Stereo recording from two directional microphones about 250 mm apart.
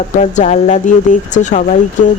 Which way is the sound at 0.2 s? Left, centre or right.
Left.